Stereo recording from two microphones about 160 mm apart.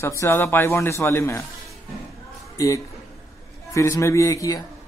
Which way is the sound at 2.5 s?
20° left (ahead or behind).